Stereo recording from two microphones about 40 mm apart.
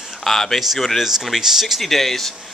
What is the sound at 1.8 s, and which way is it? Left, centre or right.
Speech, centre.